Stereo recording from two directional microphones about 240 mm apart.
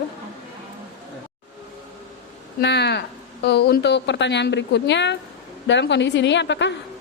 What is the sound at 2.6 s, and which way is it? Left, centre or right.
Speech, left.